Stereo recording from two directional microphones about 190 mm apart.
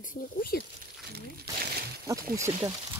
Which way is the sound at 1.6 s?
55° right (ahead or behind).